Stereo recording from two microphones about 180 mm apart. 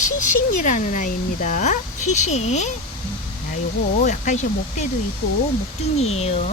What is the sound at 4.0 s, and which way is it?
Speech, 40° left (ahead or behind).